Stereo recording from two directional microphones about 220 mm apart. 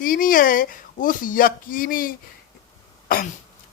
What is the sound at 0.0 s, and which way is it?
Speech, 40° left (ahead or behind).